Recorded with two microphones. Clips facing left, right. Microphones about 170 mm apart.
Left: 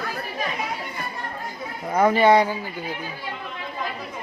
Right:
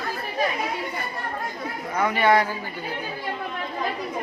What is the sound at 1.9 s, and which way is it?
Speech, 30° left (ahead or behind).